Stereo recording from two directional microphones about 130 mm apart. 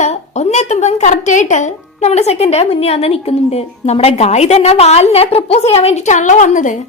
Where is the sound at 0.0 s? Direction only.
60° left (ahead or behind).